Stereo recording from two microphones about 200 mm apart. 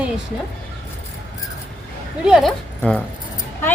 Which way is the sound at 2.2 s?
Centre (ahead or behind).